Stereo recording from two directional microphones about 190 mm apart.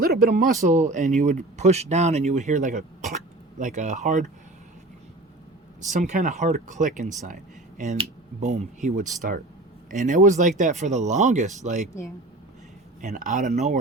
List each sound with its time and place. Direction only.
0.0 s speech: 50° right (ahead or behind)
5.9 s speech: 40° right (ahead or behind)
13.0 s speech: 45° right (ahead or behind)